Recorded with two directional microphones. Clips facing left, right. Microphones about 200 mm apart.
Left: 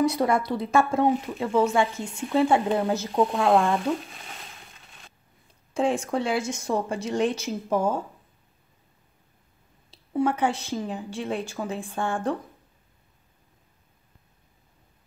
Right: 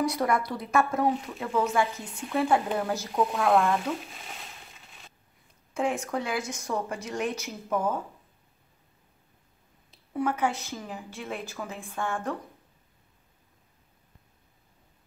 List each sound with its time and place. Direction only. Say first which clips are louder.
0.0 s speech: left 4 dB; 25° left (ahead or behind)
4.0 s crushing: left 1 dB; centre (ahead or behind)
5.7 s speech: left 4 dB; 30° left (ahead or behind)
9.8 s a woman's voice: left 5 dB; 30° left (ahead or behind)